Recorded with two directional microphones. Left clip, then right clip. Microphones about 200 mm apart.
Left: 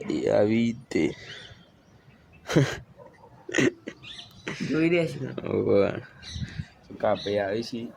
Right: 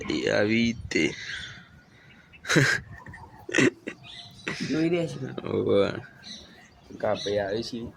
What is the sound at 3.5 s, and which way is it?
Burping, 5° right (ahead or behind).